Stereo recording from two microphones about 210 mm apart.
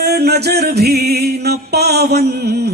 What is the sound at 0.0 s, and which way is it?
Music, 50° right (ahead or behind).